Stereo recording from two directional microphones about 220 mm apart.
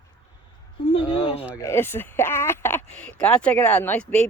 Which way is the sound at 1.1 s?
25° left (ahead or behind).